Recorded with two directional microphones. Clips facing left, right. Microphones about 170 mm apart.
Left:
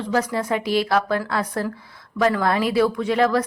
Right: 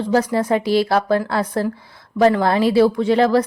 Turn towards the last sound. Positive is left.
turn(degrees=-30)  # may be behind; listen again after turning